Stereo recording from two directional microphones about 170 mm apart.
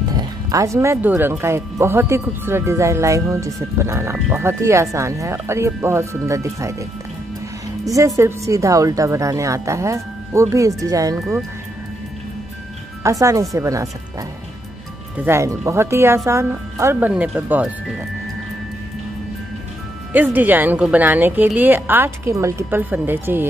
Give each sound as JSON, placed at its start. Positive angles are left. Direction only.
{"t": 0.1, "sound": "speech", "side_deg": -20}
{"t": 13.0, "sound": "speech", "side_deg": -20}
{"t": 15.1, "sound": "speech", "side_deg": -15}
{"t": 20.1, "sound": "speech", "side_deg": -10}